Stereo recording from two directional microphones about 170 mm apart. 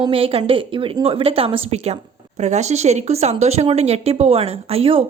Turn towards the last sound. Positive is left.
turn(degrees=-35)  # may be behind; listen again after turning